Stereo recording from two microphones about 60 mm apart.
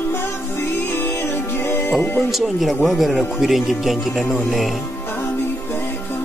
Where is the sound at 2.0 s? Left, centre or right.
Left.